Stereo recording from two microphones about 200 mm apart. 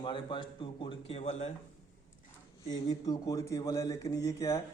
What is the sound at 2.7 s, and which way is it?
Speech, 20° left (ahead or behind).